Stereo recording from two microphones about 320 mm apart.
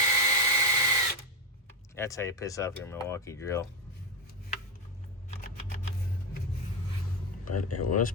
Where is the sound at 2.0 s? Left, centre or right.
Centre.